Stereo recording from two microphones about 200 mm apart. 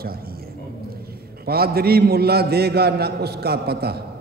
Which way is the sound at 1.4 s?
50° right (ahead or behind).